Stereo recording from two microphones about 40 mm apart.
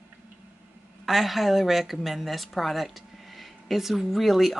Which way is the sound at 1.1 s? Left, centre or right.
Centre.